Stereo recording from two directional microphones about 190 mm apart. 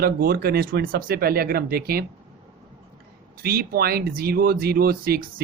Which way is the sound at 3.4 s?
55° right (ahead or behind).